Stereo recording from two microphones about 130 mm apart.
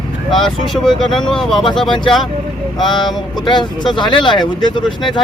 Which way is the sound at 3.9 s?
35° left (ahead or behind).